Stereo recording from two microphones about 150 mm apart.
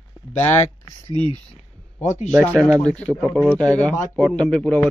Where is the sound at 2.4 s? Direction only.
10° right (ahead or behind).